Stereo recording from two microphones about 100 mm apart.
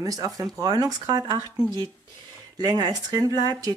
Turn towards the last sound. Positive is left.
turn(degrees=-40)  # may be behind; listen again after turning